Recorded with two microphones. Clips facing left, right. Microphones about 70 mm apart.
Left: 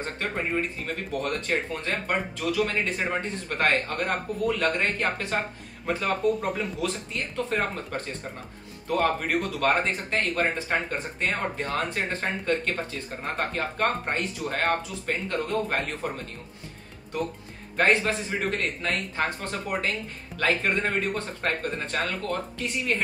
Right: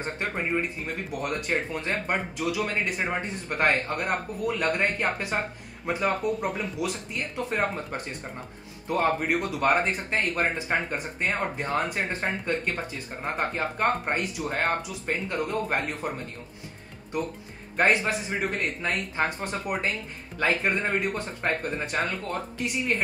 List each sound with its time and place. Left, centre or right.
0.6 s speech: centre
6.8 s speech: centre
17.7 s speech: centre